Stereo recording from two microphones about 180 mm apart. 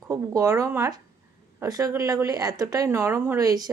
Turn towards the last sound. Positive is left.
turn(degrees=-20)  # may be behind; listen again after turning